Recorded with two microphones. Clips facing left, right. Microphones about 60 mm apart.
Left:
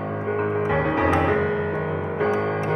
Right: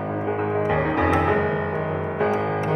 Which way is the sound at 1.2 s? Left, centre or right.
Right.